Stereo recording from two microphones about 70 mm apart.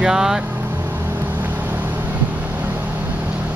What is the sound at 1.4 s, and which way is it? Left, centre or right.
Vehicle, right.